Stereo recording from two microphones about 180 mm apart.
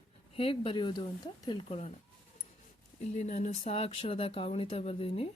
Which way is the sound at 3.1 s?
40° left (ahead or behind).